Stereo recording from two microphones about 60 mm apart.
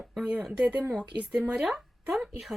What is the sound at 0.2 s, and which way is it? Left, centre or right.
Speech, centre.